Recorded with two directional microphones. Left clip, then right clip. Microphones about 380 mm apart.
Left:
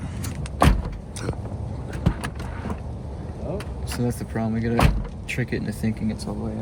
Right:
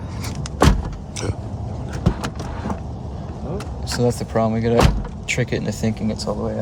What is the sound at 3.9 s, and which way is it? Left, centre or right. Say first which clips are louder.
Speech: right 9 dB; centre.